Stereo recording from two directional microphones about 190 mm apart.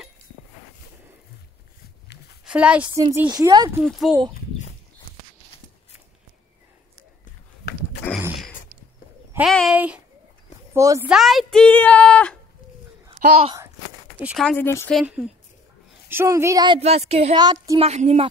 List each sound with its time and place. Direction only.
2.4 s a woman's voice: 5° right (ahead or behind)
2.9 s a woman's voice: 20° right (ahead or behind)
3.8 s a woman's voice: centre (ahead or behind)
7.7 s a sound: 55° left (ahead or behind)
9.5 s a sound: centre (ahead or behind)
10.7 s speech: 15° right (ahead or behind)
11.1 s a woman's voice: centre (ahead or behind)
13.2 s speech: 40° right (ahead or behind)
14.1 s speech: 5° right (ahead or behind)
14.4 s a woman's voice: 5° left (ahead or behind)
16.1 s a woman's voice: 15° right (ahead or behind); by 17.4 s 35° right (ahead or behind)
17.4 s a woman's voice: 20° right (ahead or behind)